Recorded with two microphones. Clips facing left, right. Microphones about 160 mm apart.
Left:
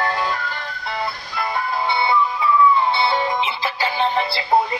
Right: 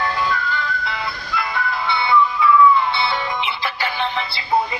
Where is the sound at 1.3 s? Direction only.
30° left (ahead or behind).